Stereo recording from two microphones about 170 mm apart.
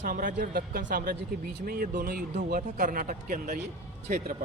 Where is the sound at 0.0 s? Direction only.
55° right (ahead or behind).